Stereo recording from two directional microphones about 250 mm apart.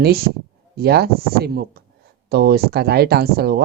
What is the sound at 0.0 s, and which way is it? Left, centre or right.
Speech, right.